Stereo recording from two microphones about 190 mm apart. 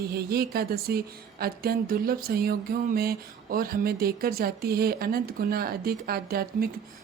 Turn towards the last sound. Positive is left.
turn(degrees=-50)  # may be behind; listen again after turning